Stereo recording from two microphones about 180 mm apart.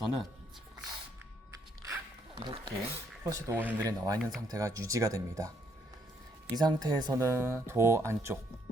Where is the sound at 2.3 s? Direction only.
25° right (ahead or behind).